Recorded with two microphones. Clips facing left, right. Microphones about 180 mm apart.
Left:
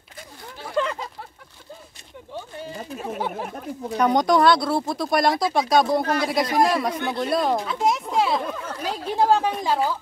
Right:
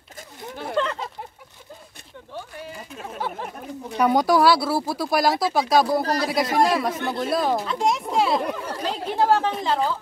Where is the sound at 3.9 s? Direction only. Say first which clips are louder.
Even; 5° right (ahead or behind).